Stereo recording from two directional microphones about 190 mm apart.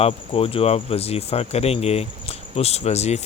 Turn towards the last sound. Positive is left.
turn(degrees=35)  # may be behind; listen again after turning